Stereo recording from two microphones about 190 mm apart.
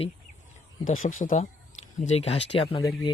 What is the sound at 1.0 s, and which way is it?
Speech, 45° left (ahead or behind).